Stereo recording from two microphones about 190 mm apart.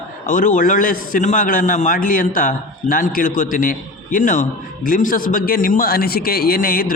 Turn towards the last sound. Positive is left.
turn(degrees=50)  # may be behind; listen again after turning